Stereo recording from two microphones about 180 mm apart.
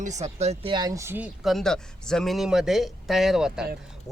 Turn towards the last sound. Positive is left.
turn(degrees=0)  # may be behind; listen again after turning